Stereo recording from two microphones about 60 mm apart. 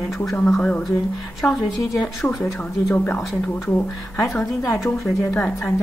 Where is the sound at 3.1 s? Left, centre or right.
Left.